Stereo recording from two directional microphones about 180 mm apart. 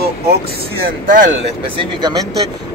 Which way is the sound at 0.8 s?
50° right (ahead or behind).